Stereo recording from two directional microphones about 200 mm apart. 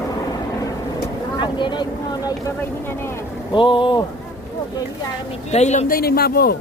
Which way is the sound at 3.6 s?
25° left (ahead or behind).